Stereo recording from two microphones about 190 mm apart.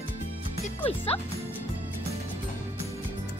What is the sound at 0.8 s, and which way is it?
Music, 30° left (ahead or behind).